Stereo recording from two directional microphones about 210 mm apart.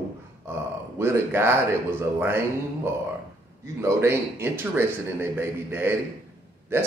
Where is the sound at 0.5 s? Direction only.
10° right (ahead or behind).